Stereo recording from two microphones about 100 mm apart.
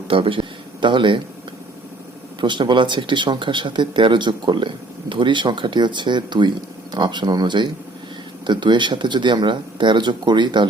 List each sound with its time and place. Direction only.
0.1 s a man's voice: 60° right (ahead or behind)
2.4 s speech: 50° right (ahead or behind)